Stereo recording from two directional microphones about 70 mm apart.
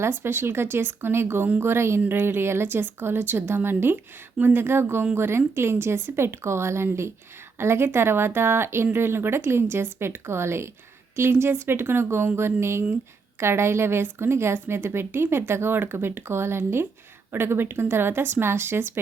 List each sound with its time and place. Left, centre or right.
0.0 s speech: right